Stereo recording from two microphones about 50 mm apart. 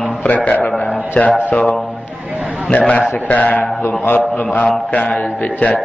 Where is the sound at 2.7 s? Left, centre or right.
Left.